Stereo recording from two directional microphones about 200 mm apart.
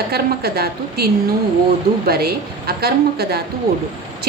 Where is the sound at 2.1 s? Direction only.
50° right (ahead or behind).